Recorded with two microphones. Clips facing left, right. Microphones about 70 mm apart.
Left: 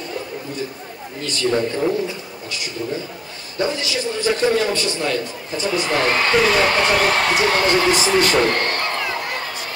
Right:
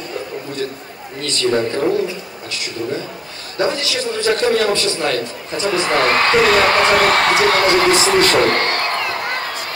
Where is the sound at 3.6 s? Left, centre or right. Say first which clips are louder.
Right 3 dB; right.